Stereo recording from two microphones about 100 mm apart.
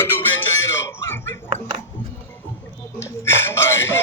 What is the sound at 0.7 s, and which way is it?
Music, 25° left (ahead or behind).